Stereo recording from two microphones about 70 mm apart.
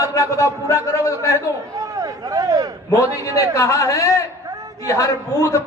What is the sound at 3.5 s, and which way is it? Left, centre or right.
A man's voice, left.